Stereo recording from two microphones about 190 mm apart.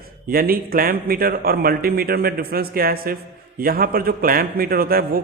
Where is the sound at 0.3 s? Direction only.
50° right (ahead or behind).